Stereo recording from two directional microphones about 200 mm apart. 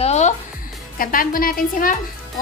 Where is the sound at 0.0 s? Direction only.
35° left (ahead or behind).